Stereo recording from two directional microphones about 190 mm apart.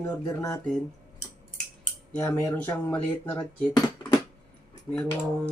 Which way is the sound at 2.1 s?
15° left (ahead or behind).